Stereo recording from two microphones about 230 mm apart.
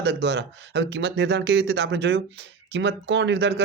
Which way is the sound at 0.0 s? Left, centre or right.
Right.